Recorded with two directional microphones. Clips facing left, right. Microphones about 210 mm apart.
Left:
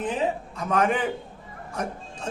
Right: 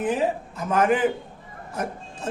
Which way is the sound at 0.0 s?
10° right (ahead or behind).